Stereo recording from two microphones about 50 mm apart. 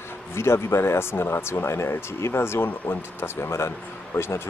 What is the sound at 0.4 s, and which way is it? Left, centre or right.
A man's voice, left.